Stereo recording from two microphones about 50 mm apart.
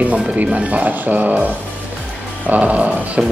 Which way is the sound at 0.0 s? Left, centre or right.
Right.